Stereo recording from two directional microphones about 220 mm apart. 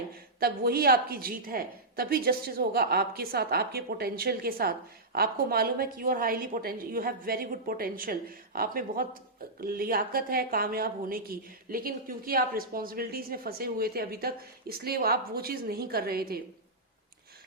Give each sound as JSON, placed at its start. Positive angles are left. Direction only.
{"t": 0.3, "sound": "a woman's voice", "side_deg": -45}